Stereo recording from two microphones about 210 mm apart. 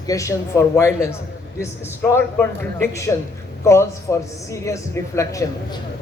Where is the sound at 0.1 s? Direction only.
15° left (ahead or behind).